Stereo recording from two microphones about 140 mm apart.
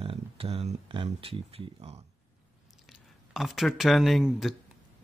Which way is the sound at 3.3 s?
Centre (ahead or behind).